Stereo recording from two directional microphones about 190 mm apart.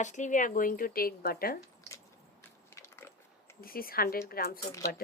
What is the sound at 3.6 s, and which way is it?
Speech, 50° left (ahead or behind).